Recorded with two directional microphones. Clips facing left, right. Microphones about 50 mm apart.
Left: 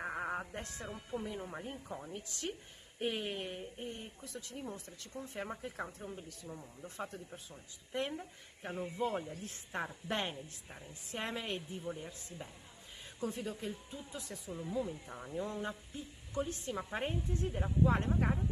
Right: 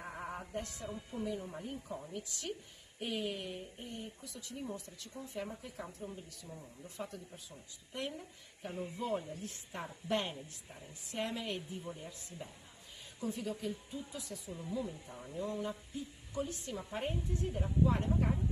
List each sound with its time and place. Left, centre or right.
0.0 s music: left
1.2 s speech: left
6.5 s speech: left
13.2 s speech: left